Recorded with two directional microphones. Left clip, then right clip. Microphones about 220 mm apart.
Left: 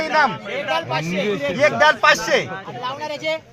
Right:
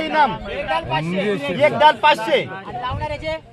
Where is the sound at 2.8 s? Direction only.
55° left (ahead or behind).